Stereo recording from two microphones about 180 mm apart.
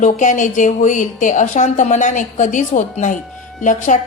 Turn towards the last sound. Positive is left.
turn(degrees=45)  # may be behind; listen again after turning